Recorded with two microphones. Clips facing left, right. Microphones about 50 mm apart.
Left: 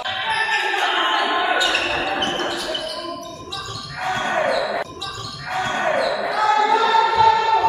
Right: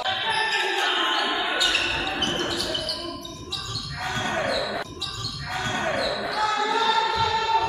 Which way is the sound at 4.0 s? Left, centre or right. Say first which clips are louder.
Left 6 dB; left.